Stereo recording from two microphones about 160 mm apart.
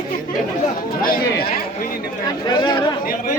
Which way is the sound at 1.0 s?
65° left (ahead or behind).